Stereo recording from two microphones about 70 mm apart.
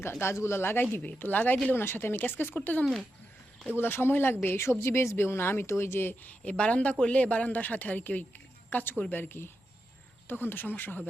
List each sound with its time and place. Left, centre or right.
0.2 s speech: left
6.4 s speech: centre